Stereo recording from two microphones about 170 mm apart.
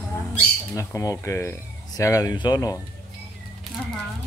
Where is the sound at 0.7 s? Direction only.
20° left (ahead or behind).